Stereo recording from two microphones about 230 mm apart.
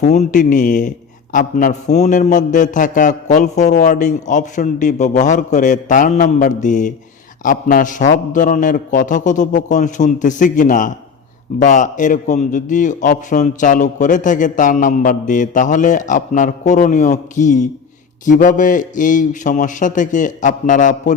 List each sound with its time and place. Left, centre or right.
0.0 s a man's voice: left